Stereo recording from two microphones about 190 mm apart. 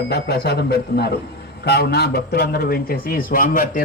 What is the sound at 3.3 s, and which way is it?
Speech, 45° left (ahead or behind).